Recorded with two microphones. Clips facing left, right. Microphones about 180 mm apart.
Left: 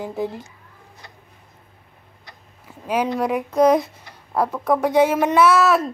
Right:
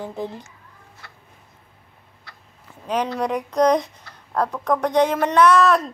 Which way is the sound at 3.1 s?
5° left (ahead or behind).